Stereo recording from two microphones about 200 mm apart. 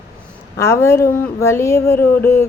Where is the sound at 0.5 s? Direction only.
15° left (ahead or behind).